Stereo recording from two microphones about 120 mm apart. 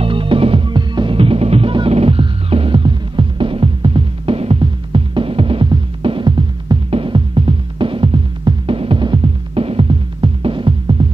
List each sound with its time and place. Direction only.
0.0 s music: 45° right (ahead or behind)